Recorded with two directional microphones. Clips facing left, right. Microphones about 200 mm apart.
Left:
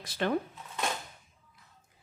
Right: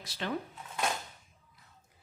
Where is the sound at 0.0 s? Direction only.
50° left (ahead or behind).